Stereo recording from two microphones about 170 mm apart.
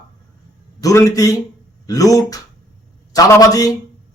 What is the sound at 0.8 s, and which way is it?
A man's voice, 20° left (ahead or behind).